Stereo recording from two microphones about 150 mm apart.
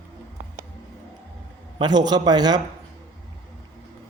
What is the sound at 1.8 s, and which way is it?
Speech, 30° right (ahead or behind).